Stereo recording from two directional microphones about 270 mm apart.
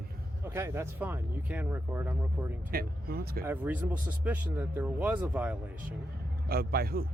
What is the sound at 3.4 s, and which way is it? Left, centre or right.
Speech, centre.